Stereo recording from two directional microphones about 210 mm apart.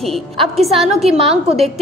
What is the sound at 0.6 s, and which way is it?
Speech, centre (ahead or behind).